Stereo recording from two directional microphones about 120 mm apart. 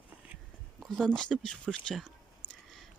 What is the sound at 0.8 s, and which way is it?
Speech, 5° left (ahead or behind).